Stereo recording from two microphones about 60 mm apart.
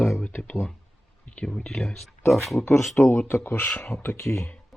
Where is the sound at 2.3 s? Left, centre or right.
Centre.